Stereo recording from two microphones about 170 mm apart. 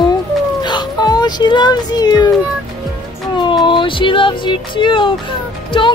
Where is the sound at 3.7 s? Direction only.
30° left (ahead or behind).